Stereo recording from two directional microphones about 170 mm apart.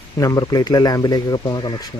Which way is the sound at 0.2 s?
20° left (ahead or behind).